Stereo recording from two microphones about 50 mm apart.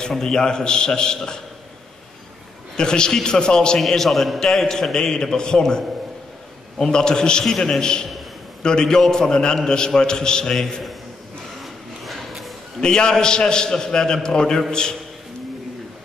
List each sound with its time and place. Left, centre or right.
0.0 s a man's voice: centre
2.7 s a man's voice: centre
3.8 s a man's voice: centre
11.6 s a sound: centre
12.8 s a man's voice: centre